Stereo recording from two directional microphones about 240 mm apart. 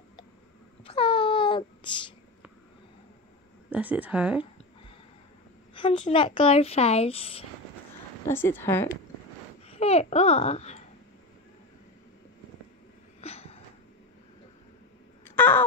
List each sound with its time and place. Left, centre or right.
0.8 s a sound: left
3.7 s speech: centre
5.8 s speech: left
8.3 s a woman's voice: centre
9.7 s speech: left
13.2 s a sound: left
15.2 s crow: centre